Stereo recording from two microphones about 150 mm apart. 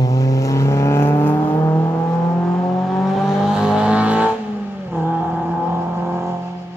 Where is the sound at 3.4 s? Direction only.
5° right (ahead or behind).